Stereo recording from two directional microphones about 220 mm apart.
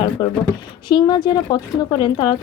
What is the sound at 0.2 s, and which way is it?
Speech, 20° left (ahead or behind).